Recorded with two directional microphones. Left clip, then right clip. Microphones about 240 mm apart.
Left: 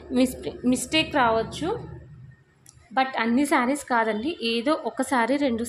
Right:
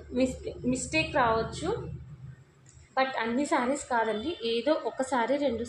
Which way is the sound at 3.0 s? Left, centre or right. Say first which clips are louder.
Left 5 dB; left.